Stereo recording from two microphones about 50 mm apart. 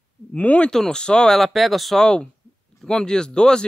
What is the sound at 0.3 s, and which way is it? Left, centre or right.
Speech, left.